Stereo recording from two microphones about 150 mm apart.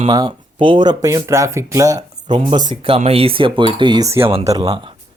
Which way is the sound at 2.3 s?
35° right (ahead or behind).